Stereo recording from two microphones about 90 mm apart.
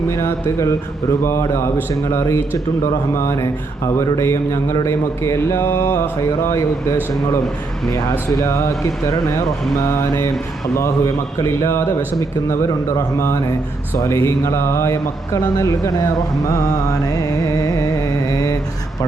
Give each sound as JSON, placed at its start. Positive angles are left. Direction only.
{"t": 0.1, "sound": "mantra", "side_deg": 35}
{"t": 8.3, "sound": "mantra", "side_deg": 35}
{"t": 10.8, "sound": "mantra", "side_deg": 35}
{"t": 13.1, "sound": "mantra", "side_deg": 35}